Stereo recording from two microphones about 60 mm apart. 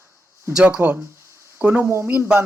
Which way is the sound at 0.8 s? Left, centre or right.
Right.